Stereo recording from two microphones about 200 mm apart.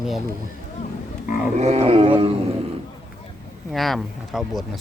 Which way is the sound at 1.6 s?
35° right (ahead or behind).